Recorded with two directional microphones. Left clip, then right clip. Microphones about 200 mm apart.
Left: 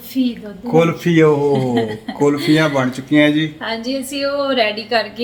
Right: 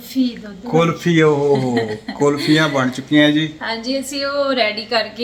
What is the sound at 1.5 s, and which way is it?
A woman's voice, 15° left (ahead or behind).